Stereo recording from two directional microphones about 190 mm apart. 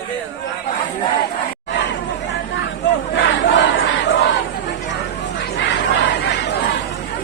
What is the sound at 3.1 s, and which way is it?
Crowd, 70° left (ahead or behind).